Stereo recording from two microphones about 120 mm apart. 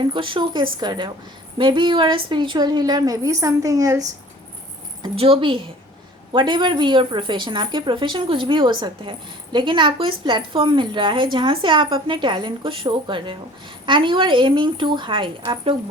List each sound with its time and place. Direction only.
0.1 s a woman's voice: 45° right (ahead or behind); by 4.0 s 30° right (ahead or behind)
5.1 s a woman's voice: 50° right (ahead or behind)